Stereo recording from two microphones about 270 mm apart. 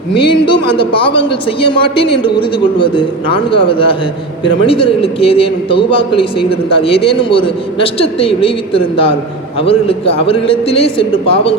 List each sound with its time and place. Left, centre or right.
0.2 s a man's voice: centre